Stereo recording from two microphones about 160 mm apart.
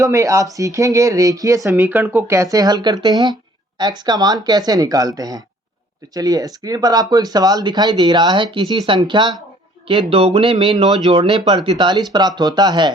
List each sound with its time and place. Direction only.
0.0 s speech: 20° right (ahead or behind)